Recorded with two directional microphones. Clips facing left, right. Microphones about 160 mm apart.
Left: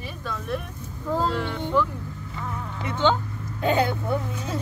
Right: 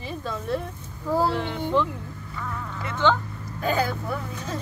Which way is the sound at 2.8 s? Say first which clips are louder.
Even; 20° left (ahead or behind).